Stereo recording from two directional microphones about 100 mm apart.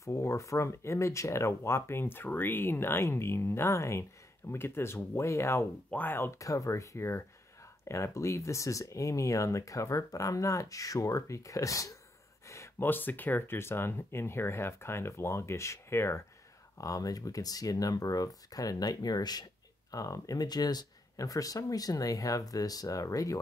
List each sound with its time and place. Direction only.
0.0 s speech: 30° left (ahead or behind)